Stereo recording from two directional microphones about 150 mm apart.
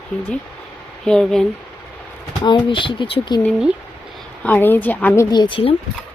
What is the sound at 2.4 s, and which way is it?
Speech, 30° left (ahead or behind).